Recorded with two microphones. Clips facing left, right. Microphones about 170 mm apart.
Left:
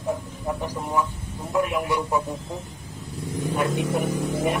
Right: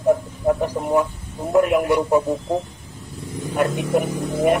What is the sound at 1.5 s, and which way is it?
Speech, 45° right (ahead or behind).